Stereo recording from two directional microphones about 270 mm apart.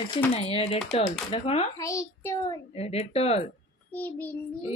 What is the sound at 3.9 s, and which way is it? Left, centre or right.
Child singing, centre.